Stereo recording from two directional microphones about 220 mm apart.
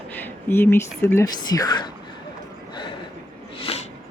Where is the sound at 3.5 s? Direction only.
25° left (ahead or behind).